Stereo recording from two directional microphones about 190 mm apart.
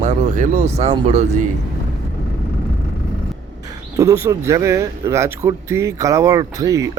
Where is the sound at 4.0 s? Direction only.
15° right (ahead or behind).